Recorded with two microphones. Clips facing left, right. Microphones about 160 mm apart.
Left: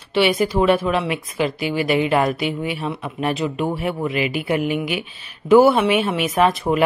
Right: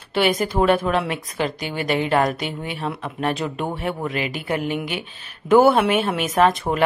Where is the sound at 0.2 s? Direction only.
40° right (ahead or behind).